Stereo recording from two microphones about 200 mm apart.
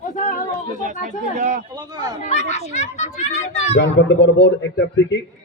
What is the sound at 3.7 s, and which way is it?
Speech, 60° left (ahead or behind).